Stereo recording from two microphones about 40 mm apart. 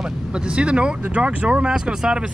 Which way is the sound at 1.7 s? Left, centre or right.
Centre.